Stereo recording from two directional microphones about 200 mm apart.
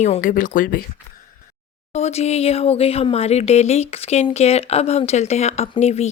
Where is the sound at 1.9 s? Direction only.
35° left (ahead or behind).